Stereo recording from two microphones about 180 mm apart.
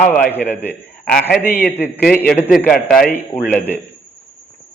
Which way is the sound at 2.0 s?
50° left (ahead or behind).